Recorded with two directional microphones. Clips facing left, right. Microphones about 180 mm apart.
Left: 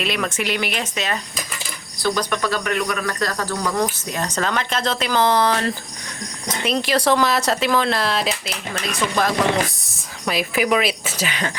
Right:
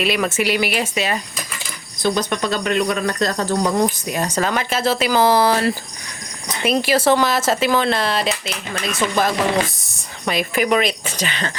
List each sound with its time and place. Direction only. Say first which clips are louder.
0.0 s speech: right 4 dB; 5° right (ahead or behind)
2.0 s speech: right 2 dB; 20° right (ahead or behind)
4.1 s speech: right 3 dB; 10° right (ahead or behind); by 11.5 s 10° left (ahead or behind)